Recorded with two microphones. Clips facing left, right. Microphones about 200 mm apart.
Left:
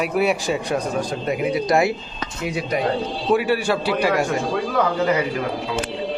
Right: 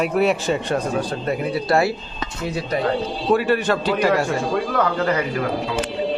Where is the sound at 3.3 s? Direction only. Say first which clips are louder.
Even; 10° left (ahead or behind).